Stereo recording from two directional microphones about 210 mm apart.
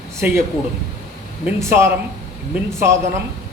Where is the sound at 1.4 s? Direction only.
10° right (ahead or behind).